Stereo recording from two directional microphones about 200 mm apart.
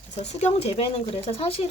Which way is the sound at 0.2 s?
30° left (ahead or behind).